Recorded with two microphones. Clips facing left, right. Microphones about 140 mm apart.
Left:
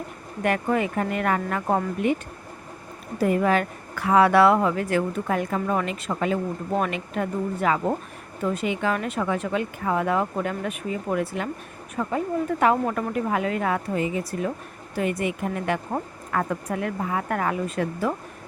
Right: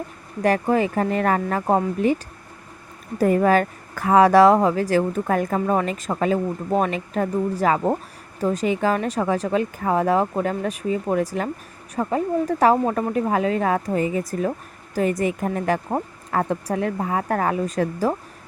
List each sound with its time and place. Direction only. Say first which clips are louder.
0.4 s speech: right 4 dB; 35° right (ahead or behind)
3.2 s speech: right 4 dB; 40° right (ahead or behind)